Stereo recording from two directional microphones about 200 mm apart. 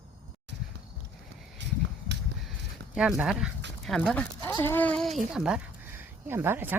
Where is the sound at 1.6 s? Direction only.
60° right (ahead or behind).